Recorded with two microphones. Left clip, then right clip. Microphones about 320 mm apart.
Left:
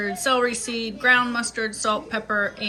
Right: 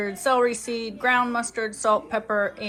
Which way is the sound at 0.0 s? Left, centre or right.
Centre.